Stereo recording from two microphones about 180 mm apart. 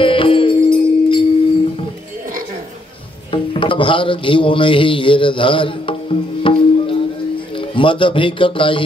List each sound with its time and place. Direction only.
0.0 s music: 30° left (ahead or behind)
3.3 s music: 30° left (ahead or behind)
7.5 s a man's voice: 30° left (ahead or behind)